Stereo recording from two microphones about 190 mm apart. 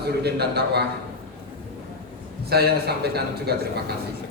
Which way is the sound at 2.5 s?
55° right (ahead or behind).